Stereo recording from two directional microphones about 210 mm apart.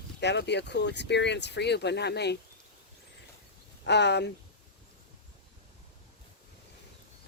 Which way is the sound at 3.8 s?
55° left (ahead or behind).